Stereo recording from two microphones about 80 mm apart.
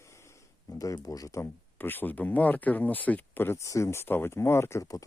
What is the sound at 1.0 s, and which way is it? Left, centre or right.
Speech, left.